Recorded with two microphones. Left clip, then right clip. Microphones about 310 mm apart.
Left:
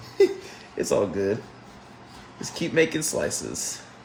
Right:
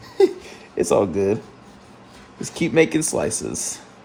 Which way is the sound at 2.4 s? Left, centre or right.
Centre.